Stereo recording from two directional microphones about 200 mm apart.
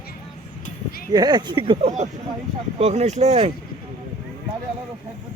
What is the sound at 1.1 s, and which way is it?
Speech, 20° right (ahead or behind).